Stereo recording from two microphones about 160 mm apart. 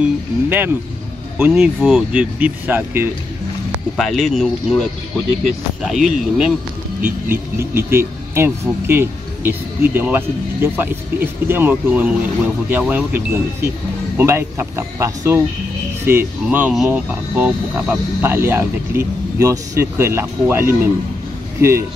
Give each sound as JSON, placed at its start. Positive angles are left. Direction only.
{"t": 0.0, "sound": "speech", "side_deg": -10}
{"t": 3.9, "sound": "speech", "side_deg": 0}
{"t": 5.9, "sound": "speech", "side_deg": 0}
{"t": 7.5, "sound": "speech", "side_deg": -15}